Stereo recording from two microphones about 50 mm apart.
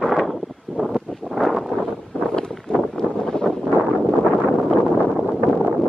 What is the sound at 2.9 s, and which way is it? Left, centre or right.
Wind noise, centre.